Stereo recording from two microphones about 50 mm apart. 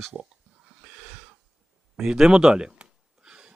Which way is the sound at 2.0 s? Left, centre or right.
Centre.